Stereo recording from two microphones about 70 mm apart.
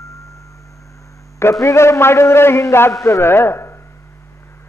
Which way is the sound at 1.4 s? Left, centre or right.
Left.